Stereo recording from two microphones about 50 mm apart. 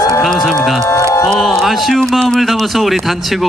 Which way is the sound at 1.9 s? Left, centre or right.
Centre.